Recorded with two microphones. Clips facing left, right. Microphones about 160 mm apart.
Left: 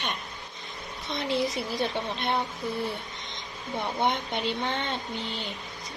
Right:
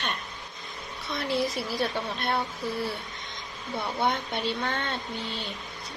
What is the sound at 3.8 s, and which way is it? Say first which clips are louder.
Speech: even; 15° left (ahead or behind).